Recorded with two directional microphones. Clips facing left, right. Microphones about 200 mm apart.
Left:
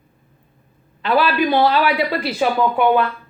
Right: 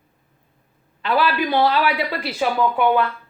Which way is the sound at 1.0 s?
25° left (ahead or behind).